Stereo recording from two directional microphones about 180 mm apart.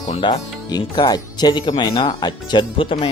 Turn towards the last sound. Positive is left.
turn(degrees=25)  # may be behind; listen again after turning